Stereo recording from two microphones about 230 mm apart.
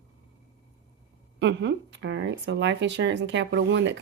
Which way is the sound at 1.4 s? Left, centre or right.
Right.